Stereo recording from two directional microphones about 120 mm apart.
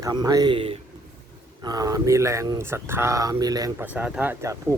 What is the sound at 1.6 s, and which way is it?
Speech, 35° right (ahead or behind).